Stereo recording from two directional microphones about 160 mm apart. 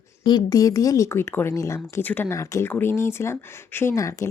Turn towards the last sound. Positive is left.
turn(degrees=20)  # may be behind; listen again after turning